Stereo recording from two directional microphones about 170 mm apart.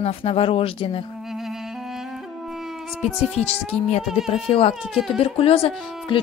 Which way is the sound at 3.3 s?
40° left (ahead or behind).